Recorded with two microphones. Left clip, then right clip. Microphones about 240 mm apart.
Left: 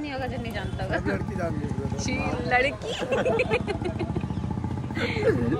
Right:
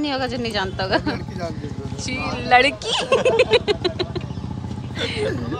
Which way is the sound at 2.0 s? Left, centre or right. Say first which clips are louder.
Right 4 dB; centre.